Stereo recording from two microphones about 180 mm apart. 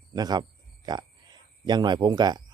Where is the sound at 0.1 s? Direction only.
25° right (ahead or behind).